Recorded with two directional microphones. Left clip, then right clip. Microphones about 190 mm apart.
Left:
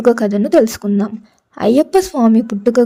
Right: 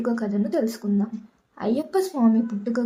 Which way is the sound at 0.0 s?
45° left (ahead or behind).